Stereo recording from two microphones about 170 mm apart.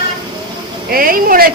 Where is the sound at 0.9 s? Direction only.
55° right (ahead or behind).